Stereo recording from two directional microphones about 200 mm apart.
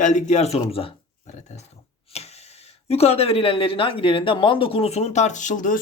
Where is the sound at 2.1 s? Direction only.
30° left (ahead or behind).